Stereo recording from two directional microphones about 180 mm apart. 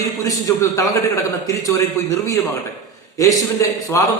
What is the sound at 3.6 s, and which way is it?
Speech, 15° left (ahead or behind).